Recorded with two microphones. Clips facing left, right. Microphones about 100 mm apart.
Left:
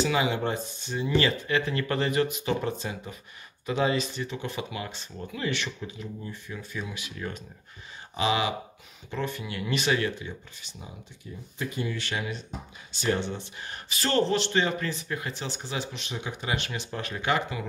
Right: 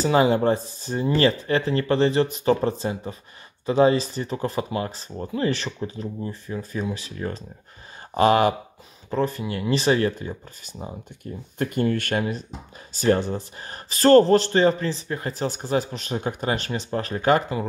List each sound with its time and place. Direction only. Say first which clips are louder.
0.0 s speech: right 7 dB; 40° right (ahead or behind)
8.2 s speech: right 9 dB; 50° right (ahead or behind)
9.1 s speech: right 8 dB; 35° right (ahead or behind)